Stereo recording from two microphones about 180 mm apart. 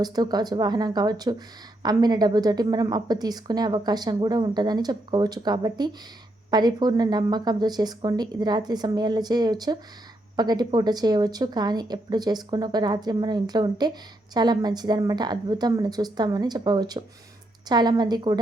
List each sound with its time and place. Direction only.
0.0 s a woman's voice: 25° right (ahead or behind)